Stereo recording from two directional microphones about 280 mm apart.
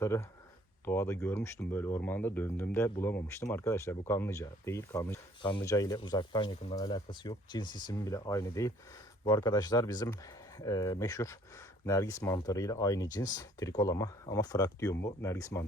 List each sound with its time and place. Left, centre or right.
0.0 s speech: centre